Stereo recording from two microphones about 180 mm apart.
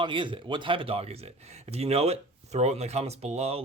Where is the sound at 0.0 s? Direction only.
25° right (ahead or behind).